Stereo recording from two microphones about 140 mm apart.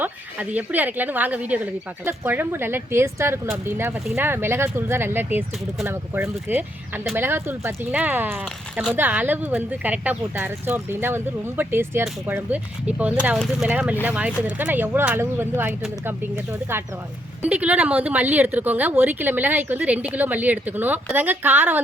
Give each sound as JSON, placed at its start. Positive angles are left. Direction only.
{"t": 0.0, "sound": "speech", "side_deg": -10}